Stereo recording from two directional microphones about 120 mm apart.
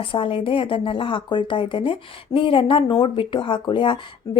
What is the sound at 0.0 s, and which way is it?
Speech, 45° left (ahead or behind).